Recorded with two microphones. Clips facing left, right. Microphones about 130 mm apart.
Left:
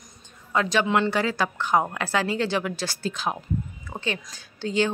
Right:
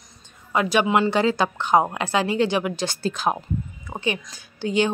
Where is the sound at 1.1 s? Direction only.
25° right (ahead or behind).